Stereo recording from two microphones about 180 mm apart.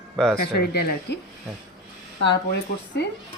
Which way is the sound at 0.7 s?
60° left (ahead or behind).